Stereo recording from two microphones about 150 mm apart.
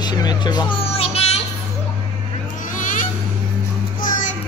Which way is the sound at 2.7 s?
60° left (ahead or behind).